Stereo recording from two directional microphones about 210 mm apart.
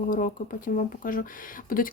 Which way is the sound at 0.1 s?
40° left (ahead or behind).